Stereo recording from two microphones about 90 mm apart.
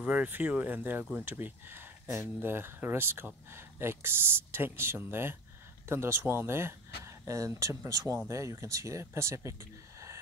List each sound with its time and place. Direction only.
0.0 s speech: 15° right (ahead or behind); by 9.6 s 30° right (ahead or behind)